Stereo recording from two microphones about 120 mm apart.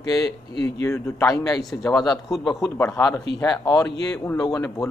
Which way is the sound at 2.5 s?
25° left (ahead or behind).